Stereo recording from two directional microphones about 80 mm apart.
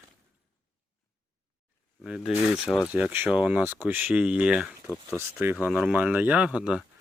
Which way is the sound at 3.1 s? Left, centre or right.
Right.